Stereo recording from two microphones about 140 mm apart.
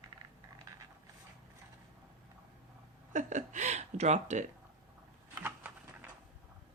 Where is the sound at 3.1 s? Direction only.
60° right (ahead or behind).